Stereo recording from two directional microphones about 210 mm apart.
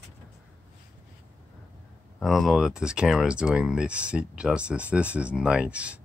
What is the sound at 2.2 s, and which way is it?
Speech, centre (ahead or behind).